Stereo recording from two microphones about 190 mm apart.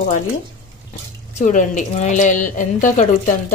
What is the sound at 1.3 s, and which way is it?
A woman's voice, 40° left (ahead or behind).